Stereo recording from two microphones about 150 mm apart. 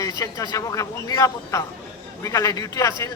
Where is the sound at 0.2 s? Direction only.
25° left (ahead or behind).